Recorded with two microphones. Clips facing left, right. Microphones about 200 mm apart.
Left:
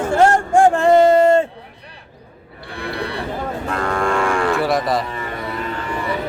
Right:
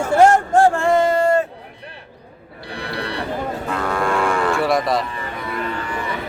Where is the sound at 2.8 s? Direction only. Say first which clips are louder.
Left 2 dB; 55° left (ahead or behind).